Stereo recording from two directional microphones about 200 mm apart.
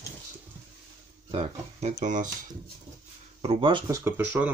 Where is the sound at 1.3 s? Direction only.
35° right (ahead or behind).